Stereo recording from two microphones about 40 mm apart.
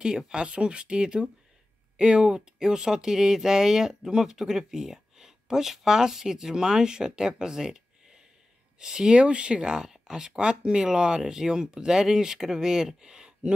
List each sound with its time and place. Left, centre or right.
0.3 s speech: right
9.6 s speech: centre